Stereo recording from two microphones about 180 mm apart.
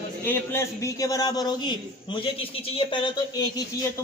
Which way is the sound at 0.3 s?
15° left (ahead or behind).